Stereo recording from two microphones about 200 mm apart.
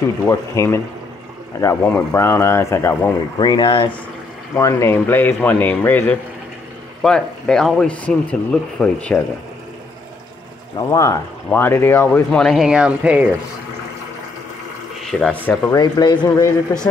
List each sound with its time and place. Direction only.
0.3 s speech: 15° left (ahead or behind)
3.3 s speech: 20° left (ahead or behind); by 9.2 s 5° left (ahead or behind)
10.8 s speech: 15° left (ahead or behind); by 13.3 s 5° right (ahead or behind)
15.0 s speech: 5° left (ahead or behind)
15.7 s speech: 20° left (ahead or behind)